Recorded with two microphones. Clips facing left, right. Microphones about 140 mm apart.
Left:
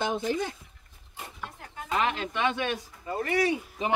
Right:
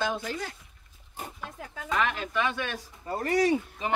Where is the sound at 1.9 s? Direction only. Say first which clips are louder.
Even; 30° left (ahead or behind).